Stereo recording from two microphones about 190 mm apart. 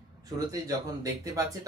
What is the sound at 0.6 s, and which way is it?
Speech, 20° right (ahead or behind).